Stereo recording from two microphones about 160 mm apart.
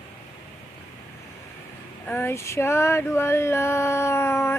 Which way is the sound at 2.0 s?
10° left (ahead or behind).